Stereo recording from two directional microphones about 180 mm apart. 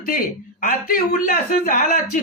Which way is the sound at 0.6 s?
50° left (ahead or behind).